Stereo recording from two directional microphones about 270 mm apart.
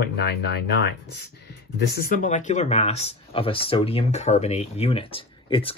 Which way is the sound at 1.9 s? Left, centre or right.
Left.